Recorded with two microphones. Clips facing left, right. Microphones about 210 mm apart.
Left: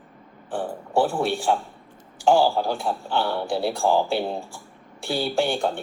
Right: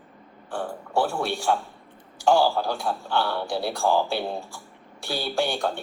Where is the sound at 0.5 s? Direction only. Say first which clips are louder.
Left 3 dB; 20° left (ahead or behind).